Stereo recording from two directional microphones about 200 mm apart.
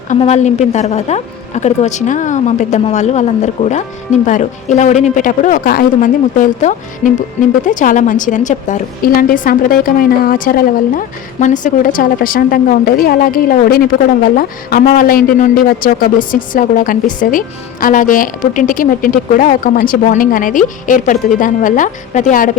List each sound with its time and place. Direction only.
0.2 s a woman's voice: 35° left (ahead or behind)